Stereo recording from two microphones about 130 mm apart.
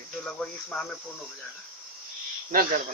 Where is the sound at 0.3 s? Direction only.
5° left (ahead or behind).